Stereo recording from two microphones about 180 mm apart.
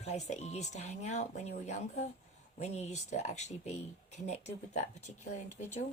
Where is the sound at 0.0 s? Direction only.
40° left (ahead or behind).